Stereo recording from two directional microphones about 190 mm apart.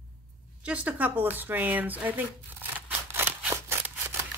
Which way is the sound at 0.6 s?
5° right (ahead or behind).